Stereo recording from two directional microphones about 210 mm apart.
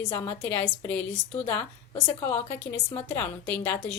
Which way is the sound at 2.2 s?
10° left (ahead or behind).